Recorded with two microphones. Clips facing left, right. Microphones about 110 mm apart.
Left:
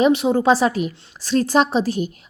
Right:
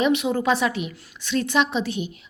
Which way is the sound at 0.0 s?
35° left (ahead or behind).